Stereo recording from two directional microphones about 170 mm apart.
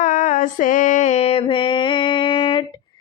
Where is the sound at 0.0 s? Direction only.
50° left (ahead or behind); by 2.6 s 30° left (ahead or behind).